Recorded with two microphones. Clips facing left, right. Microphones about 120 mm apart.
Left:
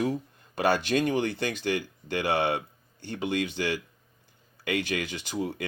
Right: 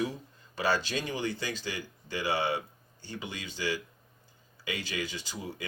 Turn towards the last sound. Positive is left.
turn(degrees=60)  # may be behind; listen again after turning